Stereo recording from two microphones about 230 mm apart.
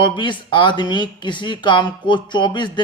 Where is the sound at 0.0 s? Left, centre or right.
Centre.